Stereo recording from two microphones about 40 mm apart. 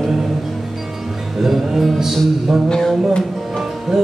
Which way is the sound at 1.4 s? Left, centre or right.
Centre.